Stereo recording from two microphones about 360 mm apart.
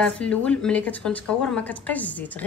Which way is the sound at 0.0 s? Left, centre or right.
Centre.